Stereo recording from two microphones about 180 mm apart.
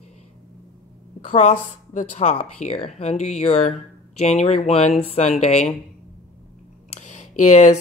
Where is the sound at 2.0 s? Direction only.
40° left (ahead or behind).